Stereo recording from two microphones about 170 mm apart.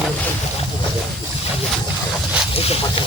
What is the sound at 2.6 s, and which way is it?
Speech, 35° left (ahead or behind).